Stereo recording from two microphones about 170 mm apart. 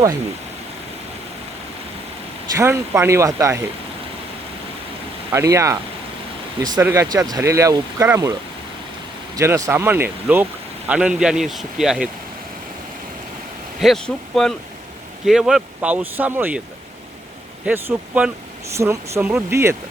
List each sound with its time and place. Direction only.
2.6 s speech: 15° right (ahead or behind)
5.3 s speech: 15° right (ahead or behind)
13.7 s speech: centre (ahead or behind)
17.7 s speech: 10° right (ahead or behind)